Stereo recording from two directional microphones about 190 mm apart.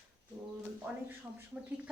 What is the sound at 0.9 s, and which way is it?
Speech, 10° right (ahead or behind).